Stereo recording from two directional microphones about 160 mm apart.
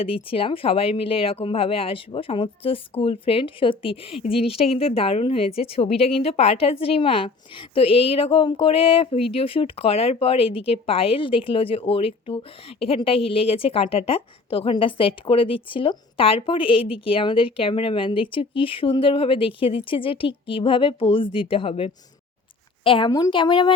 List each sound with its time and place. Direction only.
0.0 s speech: 35° left (ahead or behind)